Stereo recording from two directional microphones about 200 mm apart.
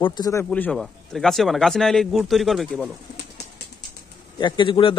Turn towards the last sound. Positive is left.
turn(degrees=25)  # may be behind; listen again after turning